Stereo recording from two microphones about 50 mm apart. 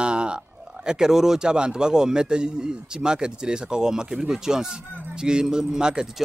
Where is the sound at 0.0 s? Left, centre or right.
Centre.